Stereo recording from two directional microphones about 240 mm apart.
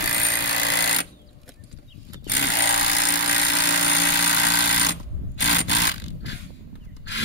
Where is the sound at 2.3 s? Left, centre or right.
Left.